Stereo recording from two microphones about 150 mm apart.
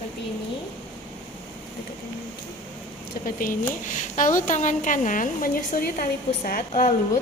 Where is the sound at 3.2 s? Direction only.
65° left (ahead or behind).